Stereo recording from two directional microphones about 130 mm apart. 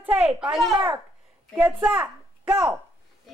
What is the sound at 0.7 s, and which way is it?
A child's voice, 20° right (ahead or behind).